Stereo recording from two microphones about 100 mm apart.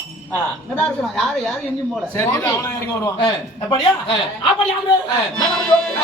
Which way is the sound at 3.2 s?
50° left (ahead or behind).